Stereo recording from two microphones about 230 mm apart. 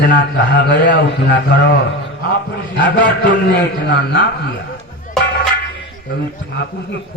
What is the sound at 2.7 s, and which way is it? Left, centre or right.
A man's voice, left.